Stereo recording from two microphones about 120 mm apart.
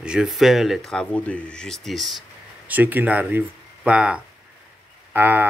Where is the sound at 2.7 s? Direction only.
15° right (ahead or behind).